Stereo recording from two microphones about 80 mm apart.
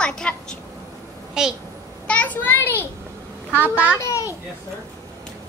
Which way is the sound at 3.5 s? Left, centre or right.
Right.